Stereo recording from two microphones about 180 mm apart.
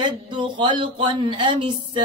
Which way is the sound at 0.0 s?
25° right (ahead or behind).